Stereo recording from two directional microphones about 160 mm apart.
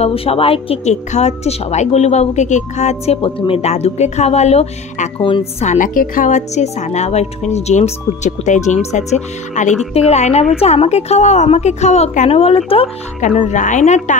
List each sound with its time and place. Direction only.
0.0 s speech: 35° left (ahead or behind)
13.2 s speech: 50° left (ahead or behind)